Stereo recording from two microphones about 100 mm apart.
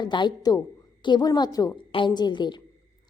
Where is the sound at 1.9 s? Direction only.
55° left (ahead or behind).